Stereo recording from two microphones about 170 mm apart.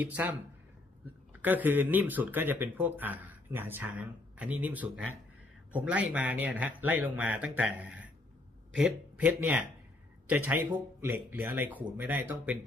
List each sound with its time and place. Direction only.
0.0 s speech: 10° right (ahead or behind)